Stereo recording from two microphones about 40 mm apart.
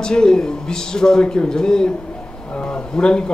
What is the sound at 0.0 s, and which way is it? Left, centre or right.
Speech, centre.